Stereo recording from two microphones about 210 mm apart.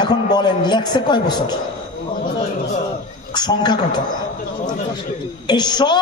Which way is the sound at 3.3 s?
20° left (ahead or behind).